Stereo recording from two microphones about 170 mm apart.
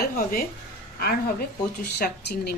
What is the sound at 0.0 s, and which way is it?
A woman's voice, 60° left (ahead or behind).